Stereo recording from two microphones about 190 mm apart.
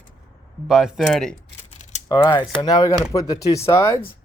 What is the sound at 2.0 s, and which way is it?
A man's voice, 20° left (ahead or behind).